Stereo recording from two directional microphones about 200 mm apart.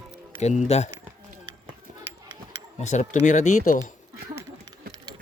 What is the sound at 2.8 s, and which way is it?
Speech, 35° left (ahead or behind).